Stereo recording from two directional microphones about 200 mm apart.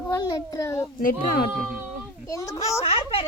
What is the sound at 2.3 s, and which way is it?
Speech, 15° left (ahead or behind).